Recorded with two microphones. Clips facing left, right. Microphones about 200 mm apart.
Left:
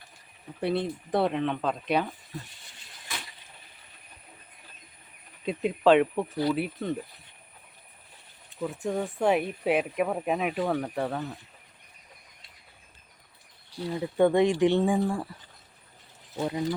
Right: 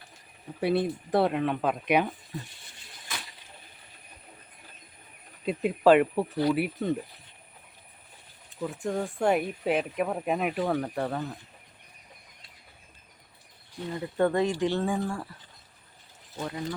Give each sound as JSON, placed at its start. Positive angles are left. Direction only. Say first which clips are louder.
{"t": 0.6, "sound": "speech", "louder": "right 2 dB", "side_deg": -10}
{"t": 5.5, "sound": "speech", "louder": "right 1 dB", "side_deg": -5}
{"t": 8.6, "sound": "speech", "louder": "left 1 dB", "side_deg": 5}
{"t": 13.9, "sound": "speech", "louder": "left 3 dB", "side_deg": 10}
{"t": 16.4, "sound": "speech", "louder": "left 5 dB", "side_deg": 20}